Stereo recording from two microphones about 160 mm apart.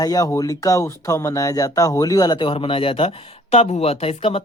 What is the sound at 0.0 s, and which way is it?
Speech, 25° left (ahead or behind).